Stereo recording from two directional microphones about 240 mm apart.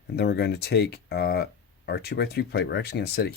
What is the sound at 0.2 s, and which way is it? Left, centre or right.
Speech, left.